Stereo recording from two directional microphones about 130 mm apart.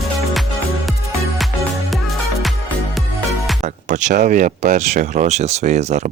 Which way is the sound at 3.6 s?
70° right (ahead or behind).